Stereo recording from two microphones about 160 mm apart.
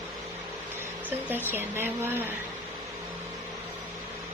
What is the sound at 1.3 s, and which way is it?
Speech, 15° right (ahead or behind).